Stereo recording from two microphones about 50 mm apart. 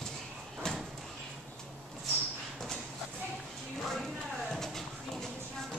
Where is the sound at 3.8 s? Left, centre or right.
Centre.